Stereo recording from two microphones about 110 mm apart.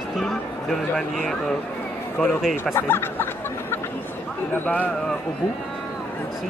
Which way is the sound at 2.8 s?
20° left (ahead or behind).